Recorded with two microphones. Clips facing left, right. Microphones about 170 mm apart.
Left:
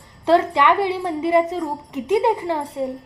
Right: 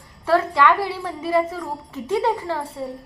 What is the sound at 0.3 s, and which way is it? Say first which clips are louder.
A woman's voice: left 2 dB; 20° left (ahead or behind).